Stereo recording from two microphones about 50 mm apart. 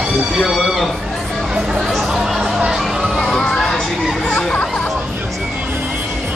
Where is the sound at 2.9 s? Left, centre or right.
Centre.